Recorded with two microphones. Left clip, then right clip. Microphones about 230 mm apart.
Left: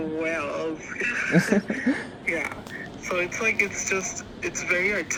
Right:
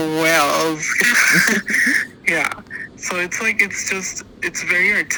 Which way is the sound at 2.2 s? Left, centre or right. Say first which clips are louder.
Right 9 dB; right.